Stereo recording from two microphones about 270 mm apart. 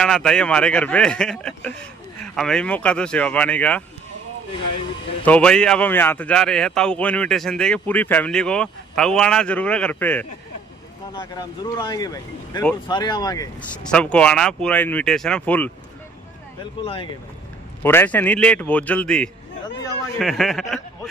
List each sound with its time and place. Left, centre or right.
0.0 s a man's voice: centre
5.2 s a man's voice: centre
16.8 s speech: centre
17.8 s a man's voice: centre